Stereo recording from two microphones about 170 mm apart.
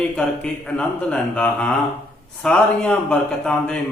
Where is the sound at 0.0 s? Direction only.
5° left (ahead or behind).